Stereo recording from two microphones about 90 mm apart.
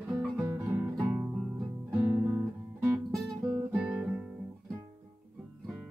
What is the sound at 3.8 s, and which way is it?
Guitar, 10° right (ahead or behind).